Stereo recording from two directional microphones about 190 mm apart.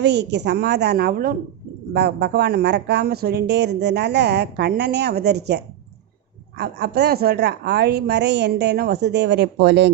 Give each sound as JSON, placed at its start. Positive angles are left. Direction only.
{"t": 0.0, "sound": "speech", "side_deg": -65}